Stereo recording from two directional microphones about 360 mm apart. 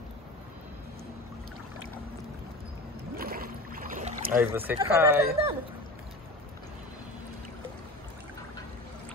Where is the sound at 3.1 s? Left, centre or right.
Right.